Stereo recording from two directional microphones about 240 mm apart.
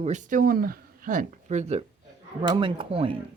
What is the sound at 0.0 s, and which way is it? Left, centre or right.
Speech, right.